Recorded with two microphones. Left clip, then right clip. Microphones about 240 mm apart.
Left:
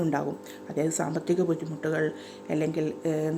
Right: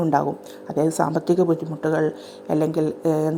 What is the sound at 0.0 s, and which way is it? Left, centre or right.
Speech, centre.